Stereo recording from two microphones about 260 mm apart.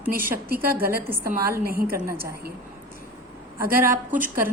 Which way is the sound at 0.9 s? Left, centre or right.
Centre.